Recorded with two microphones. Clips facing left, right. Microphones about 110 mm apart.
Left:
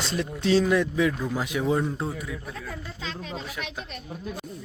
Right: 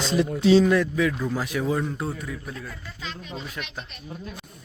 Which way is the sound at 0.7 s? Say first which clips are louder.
Right 1 dB; 20° left (ahead or behind).